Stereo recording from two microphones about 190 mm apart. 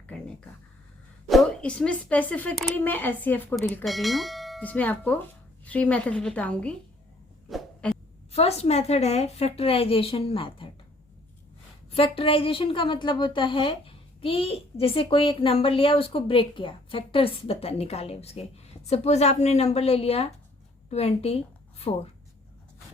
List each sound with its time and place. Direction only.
1.3 s speech: 5° left (ahead or behind)
7.5 s a sound: 5° left (ahead or behind)
8.3 s a woman's voice: 35° left (ahead or behind)
11.9 s a woman's voice: 30° left (ahead or behind)